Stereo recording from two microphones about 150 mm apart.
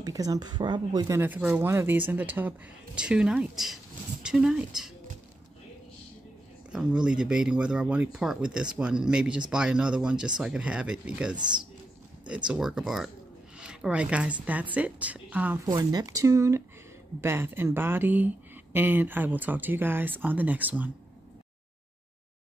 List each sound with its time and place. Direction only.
0.0 s speech: 25° right (ahead or behind)
1.2 s speech: 10° right (ahead or behind)
6.7 s speech: 5° right (ahead or behind)
12.4 s speech: 5° right (ahead or behind)
15.7 s speech: 25° right (ahead or behind)